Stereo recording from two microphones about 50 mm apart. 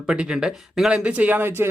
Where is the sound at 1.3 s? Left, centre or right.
Right.